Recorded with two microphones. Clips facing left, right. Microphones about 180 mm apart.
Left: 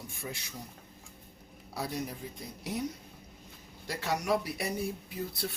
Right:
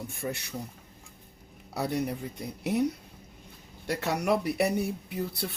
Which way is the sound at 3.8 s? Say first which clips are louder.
Right 4 dB; 60° right (ahead or behind).